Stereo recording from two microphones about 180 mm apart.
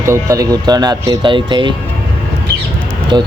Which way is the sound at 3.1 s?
25° right (ahead or behind).